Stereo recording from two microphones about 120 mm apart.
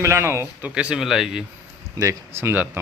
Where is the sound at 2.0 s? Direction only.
25° right (ahead or behind).